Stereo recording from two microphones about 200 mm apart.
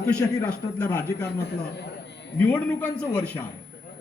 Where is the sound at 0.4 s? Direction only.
10° left (ahead or behind).